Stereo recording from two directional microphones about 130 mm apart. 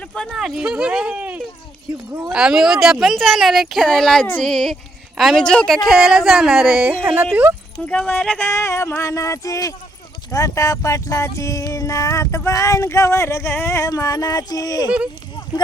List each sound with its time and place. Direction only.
0.1 s speech: centre (ahead or behind); by 7.3 s 15° right (ahead or behind)
7.9 s speech: 10° left (ahead or behind)
8.4 s a sound: 20° left (ahead or behind)